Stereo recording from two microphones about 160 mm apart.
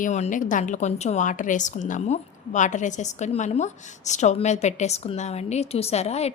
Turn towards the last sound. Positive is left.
turn(degrees=40)  # may be behind; listen again after turning